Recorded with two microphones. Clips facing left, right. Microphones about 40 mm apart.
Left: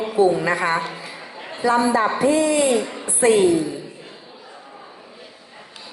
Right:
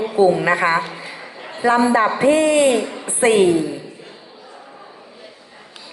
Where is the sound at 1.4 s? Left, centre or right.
Centre.